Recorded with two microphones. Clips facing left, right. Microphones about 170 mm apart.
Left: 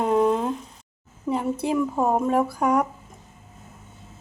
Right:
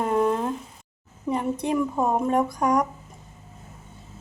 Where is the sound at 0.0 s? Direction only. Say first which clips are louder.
Left 2 dB; 5° left (ahead or behind).